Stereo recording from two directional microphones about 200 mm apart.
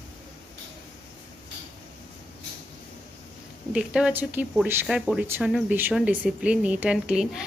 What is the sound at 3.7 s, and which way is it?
A woman's voice, 5° right (ahead or behind).